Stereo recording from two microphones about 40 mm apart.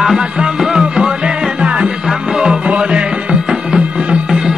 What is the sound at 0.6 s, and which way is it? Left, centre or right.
Music, centre.